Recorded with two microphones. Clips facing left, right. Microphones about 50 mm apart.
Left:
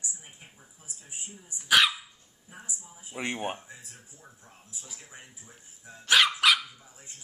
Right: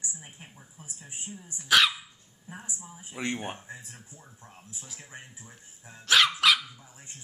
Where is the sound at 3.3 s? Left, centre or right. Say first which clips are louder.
Left 2 dB; left.